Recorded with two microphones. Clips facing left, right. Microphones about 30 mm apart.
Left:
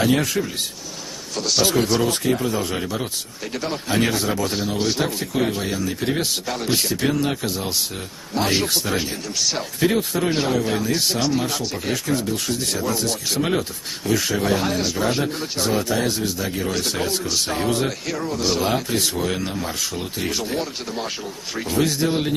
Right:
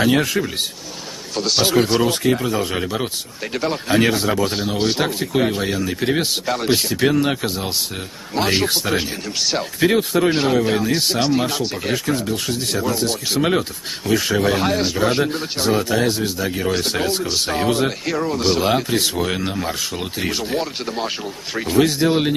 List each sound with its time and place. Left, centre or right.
0.0 s speech: right
15.9 s speech: centre
16.2 s speech: right